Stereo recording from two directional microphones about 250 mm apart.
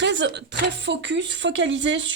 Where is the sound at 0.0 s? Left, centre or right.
Right.